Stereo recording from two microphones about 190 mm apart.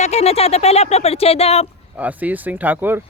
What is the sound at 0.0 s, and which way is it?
Speech, 35° left (ahead or behind).